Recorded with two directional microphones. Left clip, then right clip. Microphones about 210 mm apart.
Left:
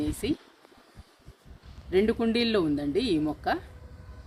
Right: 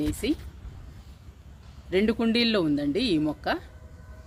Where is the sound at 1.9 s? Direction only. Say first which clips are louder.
Even; 45° right (ahead or behind).